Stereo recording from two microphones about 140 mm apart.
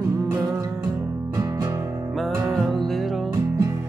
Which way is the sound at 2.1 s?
Centre (ahead or behind).